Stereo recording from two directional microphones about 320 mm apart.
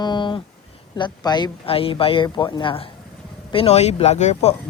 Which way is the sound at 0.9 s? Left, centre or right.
Centre.